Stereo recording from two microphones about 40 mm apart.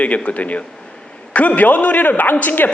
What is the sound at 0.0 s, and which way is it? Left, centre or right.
A woman's voice, left.